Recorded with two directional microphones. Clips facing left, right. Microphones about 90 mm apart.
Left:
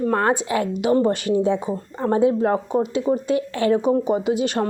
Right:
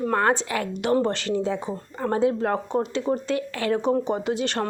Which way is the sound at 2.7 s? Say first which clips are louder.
Left 4 dB; 10° left (ahead or behind).